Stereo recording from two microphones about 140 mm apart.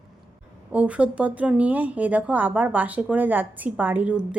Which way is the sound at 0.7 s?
10° right (ahead or behind).